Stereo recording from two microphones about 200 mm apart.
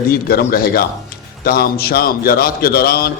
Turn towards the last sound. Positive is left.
turn(degrees=50)  # may be behind; listen again after turning